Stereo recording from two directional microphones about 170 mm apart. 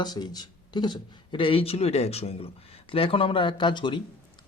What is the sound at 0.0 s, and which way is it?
Speech, 25° left (ahead or behind).